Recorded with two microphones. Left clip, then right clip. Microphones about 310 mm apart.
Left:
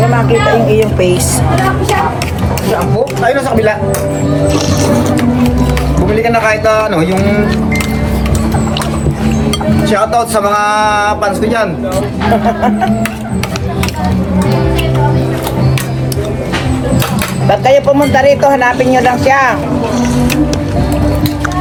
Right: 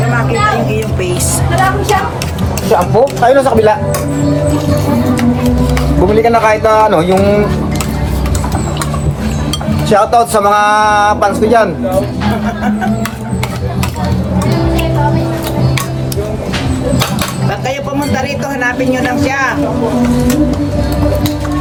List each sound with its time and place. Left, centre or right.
0.7 s speech: centre
3.2 s speech: centre
6.2 s speech: centre
9.9 s speech: centre
17.5 s speech: left